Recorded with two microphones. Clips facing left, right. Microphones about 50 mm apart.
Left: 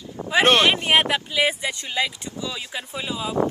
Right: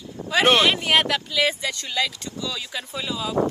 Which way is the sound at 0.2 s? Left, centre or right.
Left.